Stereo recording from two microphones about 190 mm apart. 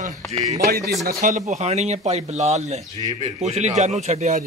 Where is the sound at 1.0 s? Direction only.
45° right (ahead or behind).